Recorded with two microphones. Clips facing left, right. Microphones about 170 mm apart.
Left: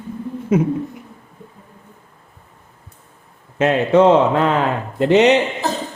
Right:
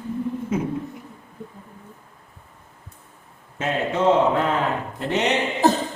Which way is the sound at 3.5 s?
85° left.